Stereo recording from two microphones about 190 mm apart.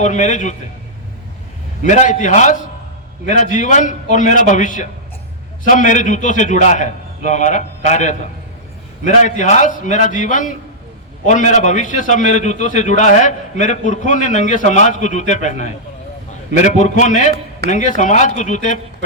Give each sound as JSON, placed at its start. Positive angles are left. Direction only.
{"t": 0.0, "sound": "a man's voice", "side_deg": 40}
{"t": 1.8, "sound": "a man's voice", "side_deg": 40}